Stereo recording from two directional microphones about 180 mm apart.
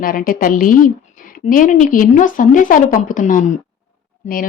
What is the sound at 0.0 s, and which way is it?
A woman's voice, 50° left (ahead or behind).